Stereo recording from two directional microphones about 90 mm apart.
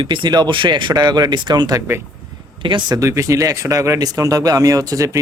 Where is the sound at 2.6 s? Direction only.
65° right (ahead or behind).